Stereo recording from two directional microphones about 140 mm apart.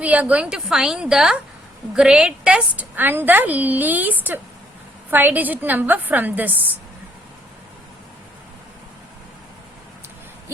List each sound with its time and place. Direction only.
0.0 s a woman's voice: 10° right (ahead or behind)